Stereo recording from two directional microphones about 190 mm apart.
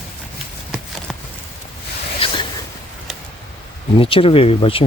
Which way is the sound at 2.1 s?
30° left (ahead or behind).